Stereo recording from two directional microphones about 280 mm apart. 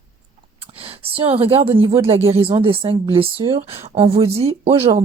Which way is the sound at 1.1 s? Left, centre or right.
Centre.